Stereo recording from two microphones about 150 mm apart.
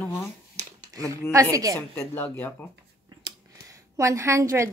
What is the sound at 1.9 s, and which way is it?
Speech, 15° left (ahead or behind).